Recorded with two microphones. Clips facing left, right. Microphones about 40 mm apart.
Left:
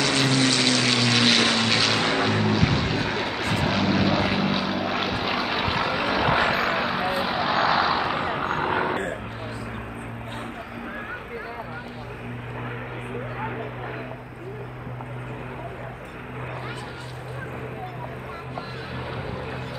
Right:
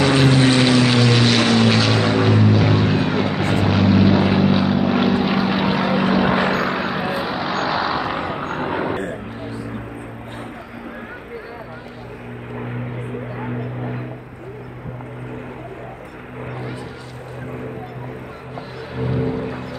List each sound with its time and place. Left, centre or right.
0.0 s aircraft: centre
1.3 s vehicle: centre
18.9 s vehicle: centre
19.2 s boat: centre